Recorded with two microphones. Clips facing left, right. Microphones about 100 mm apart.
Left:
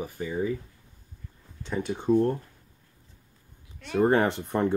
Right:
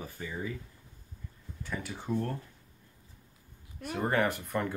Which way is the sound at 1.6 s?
25° left (ahead or behind).